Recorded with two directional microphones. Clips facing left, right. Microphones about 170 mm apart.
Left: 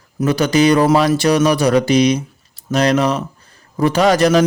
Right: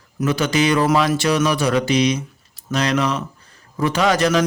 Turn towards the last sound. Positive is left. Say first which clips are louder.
# left 5 dB
turn(degrees=35)  # may be behind; listen again after turning